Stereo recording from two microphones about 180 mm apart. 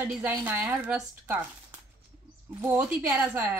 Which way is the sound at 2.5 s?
15° right (ahead or behind).